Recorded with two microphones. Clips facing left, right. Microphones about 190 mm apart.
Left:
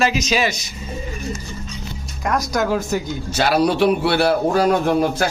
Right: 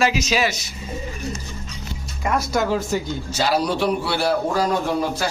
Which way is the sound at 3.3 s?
65° left (ahead or behind).